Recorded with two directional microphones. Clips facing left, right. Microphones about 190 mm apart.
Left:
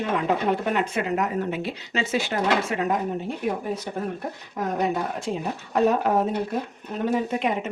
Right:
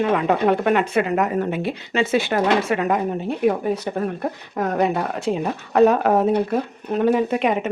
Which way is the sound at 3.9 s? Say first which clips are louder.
Right 6 dB; 80° right.